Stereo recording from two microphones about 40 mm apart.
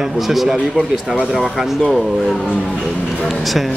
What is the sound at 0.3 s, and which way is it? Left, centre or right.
Speech, centre.